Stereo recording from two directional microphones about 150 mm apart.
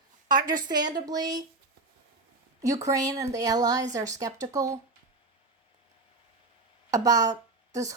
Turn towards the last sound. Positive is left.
turn(degrees=-25)  # may be behind; listen again after turning